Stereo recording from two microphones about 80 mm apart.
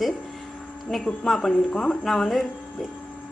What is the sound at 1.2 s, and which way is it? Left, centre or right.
A woman's voice, centre.